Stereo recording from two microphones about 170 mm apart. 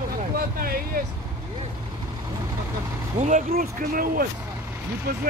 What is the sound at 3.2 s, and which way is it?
Speech, 45° right (ahead or behind).